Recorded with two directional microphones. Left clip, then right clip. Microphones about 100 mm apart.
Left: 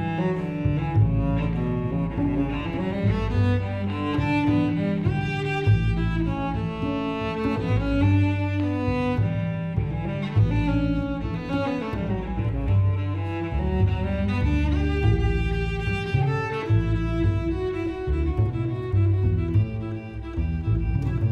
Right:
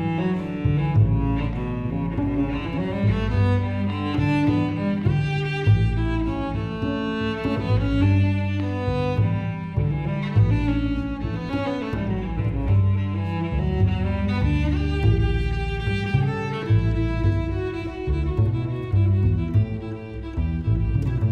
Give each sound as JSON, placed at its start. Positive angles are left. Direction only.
{"t": 0.0, "sound": "cello", "side_deg": 40}
{"t": 4.0, "sound": "music", "side_deg": 40}
{"t": 6.9, "sound": "music", "side_deg": 40}
{"t": 10.6, "sound": "cello", "side_deg": 40}
{"t": 11.5, "sound": "music", "side_deg": 40}
{"t": 13.7, "sound": "cello", "side_deg": 40}